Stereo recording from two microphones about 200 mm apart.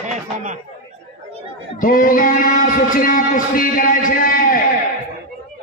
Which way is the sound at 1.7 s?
45° left (ahead or behind).